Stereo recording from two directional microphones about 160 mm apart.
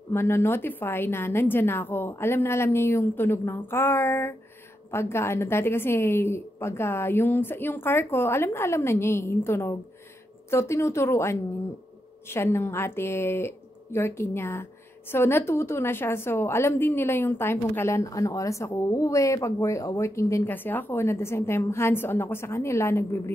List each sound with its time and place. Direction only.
0.1 s a woman's voice: 15° left (ahead or behind)